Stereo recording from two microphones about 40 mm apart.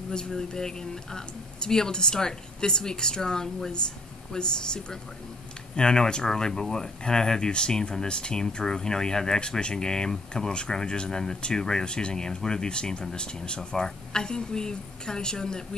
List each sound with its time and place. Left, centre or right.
0.1 s speech: centre